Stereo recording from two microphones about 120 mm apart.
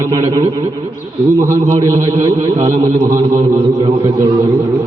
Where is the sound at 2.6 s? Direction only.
30° right (ahead or behind).